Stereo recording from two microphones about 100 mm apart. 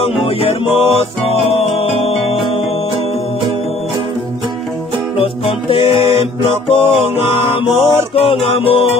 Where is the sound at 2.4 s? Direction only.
65° left (ahead or behind).